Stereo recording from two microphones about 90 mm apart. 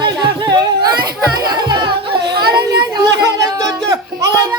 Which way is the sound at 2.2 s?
50° right (ahead or behind).